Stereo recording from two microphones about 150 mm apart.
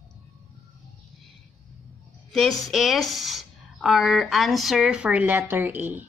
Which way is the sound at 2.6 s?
Centre (ahead or behind).